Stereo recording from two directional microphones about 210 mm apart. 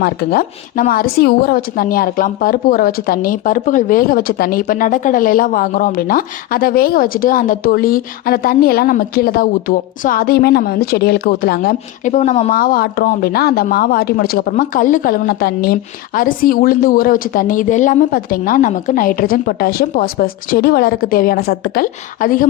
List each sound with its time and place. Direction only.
0.0 s speech: 50° left (ahead or behind)